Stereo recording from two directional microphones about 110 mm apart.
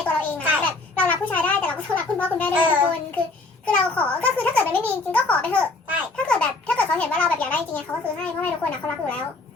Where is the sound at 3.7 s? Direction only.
15° left (ahead or behind).